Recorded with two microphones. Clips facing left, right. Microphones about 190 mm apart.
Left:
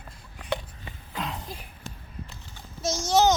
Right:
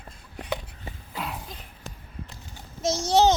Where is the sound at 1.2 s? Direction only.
5° right (ahead or behind).